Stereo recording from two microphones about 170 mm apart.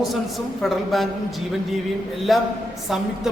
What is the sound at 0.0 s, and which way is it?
A woman's voice, centre (ahead or behind).